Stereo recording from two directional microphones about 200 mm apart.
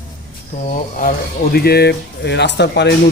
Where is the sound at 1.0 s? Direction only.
45° left (ahead or behind).